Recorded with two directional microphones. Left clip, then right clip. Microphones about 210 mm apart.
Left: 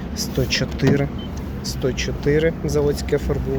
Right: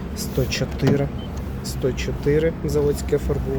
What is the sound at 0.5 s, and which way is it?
Speech, 15° right (ahead or behind).